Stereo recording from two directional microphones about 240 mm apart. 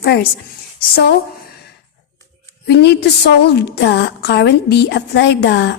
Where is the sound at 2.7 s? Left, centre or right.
Left.